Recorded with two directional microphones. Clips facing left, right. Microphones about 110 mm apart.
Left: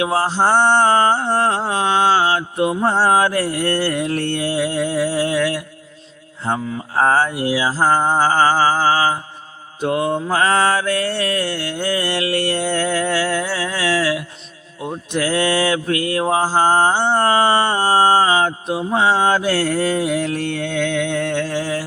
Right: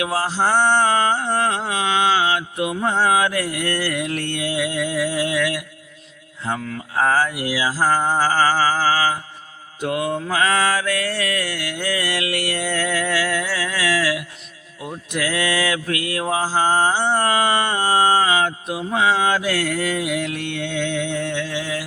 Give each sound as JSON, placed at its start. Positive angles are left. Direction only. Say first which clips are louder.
{"t": 0.0, "sound": "mantra", "louder": "left 4 dB", "side_deg": 30}